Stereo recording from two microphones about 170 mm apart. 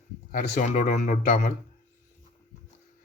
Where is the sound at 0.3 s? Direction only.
50° left (ahead or behind).